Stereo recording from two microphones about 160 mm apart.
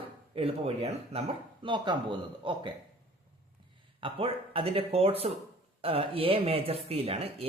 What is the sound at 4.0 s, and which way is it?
Speech, 35° right (ahead or behind).